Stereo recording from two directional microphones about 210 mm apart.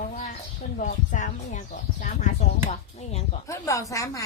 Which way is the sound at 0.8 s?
35° left (ahead or behind).